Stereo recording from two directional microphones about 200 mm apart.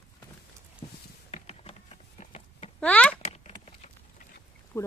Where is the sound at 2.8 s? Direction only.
5° left (ahead or behind).